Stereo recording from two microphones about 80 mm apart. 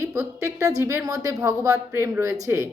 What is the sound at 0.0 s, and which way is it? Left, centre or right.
A woman's voice, right.